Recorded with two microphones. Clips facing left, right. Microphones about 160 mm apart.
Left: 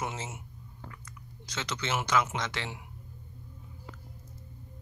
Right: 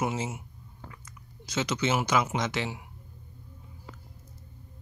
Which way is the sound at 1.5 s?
10° right (ahead or behind).